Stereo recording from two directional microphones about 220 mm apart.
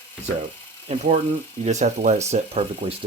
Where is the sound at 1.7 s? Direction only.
30° right (ahead or behind).